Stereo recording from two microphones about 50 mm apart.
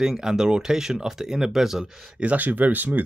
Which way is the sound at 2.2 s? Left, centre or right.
Right.